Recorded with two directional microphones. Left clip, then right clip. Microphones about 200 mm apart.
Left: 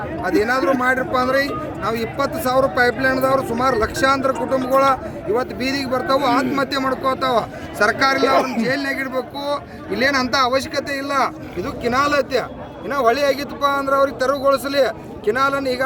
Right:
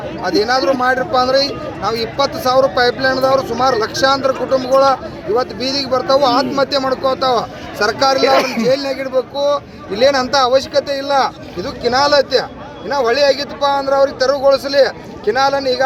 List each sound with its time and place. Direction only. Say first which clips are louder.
0.2 s speech: right 4 dB; 35° left (ahead or behind)
13.6 s speech: right 2 dB; 40° left (ahead or behind)